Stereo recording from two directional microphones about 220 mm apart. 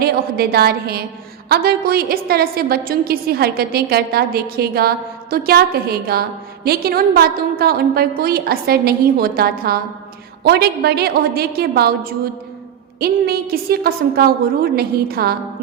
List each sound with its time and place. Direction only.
0.0 s a woman's voice: 45° right (ahead or behind)